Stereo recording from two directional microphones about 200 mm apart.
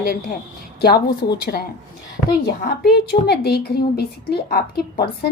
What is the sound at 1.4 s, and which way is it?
A woman's voice, 50° left (ahead or behind).